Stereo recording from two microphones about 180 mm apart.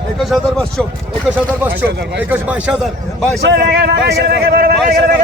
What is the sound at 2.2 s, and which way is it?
Speech, 10° right (ahead or behind).